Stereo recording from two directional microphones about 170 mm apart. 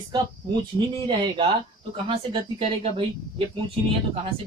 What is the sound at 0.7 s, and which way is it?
Speech, 25° right (ahead or behind).